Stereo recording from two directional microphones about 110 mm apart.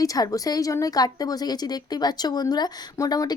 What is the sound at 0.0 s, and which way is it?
A woman's voice, 35° left (ahead or behind).